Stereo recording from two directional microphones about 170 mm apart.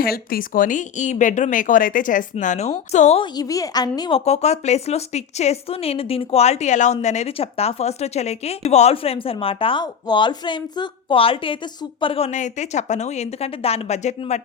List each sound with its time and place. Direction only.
0.0 s a woman's voice: 60° left (ahead or behind); by 3.2 s 40° left (ahead or behind)
3.3 s a woman's voice: 20° left (ahead or behind)
4.3 s a woman's voice: 40° left (ahead or behind)